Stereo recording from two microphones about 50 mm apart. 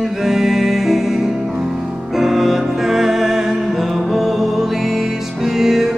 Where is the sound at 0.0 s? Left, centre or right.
Centre.